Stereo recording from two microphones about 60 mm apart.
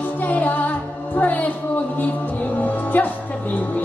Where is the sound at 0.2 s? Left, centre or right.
Left.